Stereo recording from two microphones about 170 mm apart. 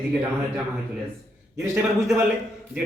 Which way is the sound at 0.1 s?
10° right (ahead or behind).